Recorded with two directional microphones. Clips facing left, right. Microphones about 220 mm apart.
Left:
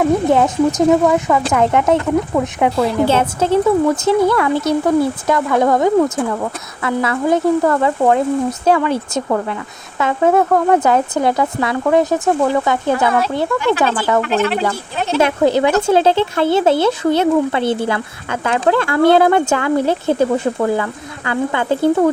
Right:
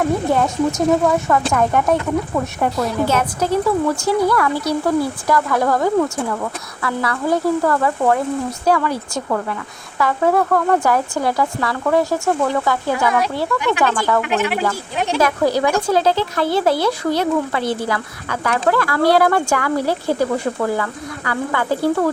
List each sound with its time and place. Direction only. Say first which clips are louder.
0.3 s speech: left 4 dB; 20° left (ahead or behind)
2.7 s speech: left 4 dB; 30° left (ahead or behind)
14.3 s speech: left 3 dB; 15° right (ahead or behind)
15.2 s speech: left 4 dB; 25° left (ahead or behind)